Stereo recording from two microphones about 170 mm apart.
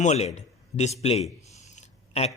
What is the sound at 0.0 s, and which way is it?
A man's voice, 40° left (ahead or behind).